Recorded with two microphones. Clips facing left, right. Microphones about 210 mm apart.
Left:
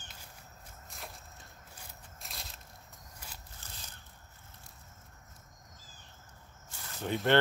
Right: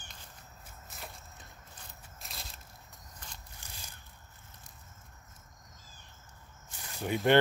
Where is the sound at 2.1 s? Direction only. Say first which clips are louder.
Right 1 dB; centre (ahead or behind).